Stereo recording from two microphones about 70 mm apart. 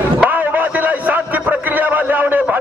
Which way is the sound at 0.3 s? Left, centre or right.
Right.